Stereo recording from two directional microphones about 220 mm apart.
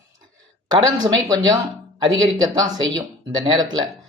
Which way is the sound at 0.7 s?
20° right (ahead or behind).